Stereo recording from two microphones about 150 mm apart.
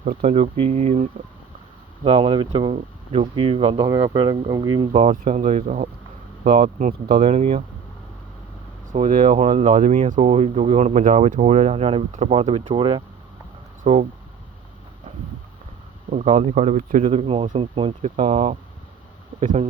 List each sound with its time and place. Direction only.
0.0 s speech: 50° right (ahead or behind)
2.0 s speech: 35° right (ahead or behind)
4.9 s speech: 45° right (ahead or behind)
6.4 s speech: 70° right (ahead or behind)
7.2 s speech: 45° right (ahead or behind)
9.0 s speech: 55° right (ahead or behind)
10.2 s speech: 45° right (ahead or behind)
16.0 s speech: 55° right (ahead or behind)
17.1 s speech: 40° right (ahead or behind)